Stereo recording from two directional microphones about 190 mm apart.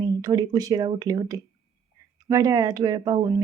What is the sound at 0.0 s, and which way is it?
A woman's voice, 20° right (ahead or behind).